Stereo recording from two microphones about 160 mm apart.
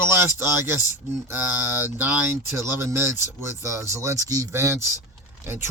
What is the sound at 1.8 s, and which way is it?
Speech, 10° right (ahead or behind).